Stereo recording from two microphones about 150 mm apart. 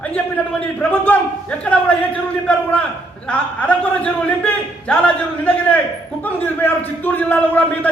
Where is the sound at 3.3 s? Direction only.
10° left (ahead or behind).